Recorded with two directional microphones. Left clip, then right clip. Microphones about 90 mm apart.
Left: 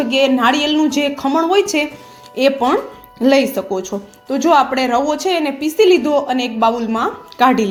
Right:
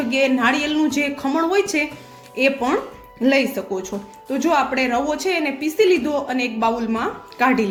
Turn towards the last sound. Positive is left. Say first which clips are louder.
# left 5 dB
turn(degrees=55)  # may be behind; listen again after turning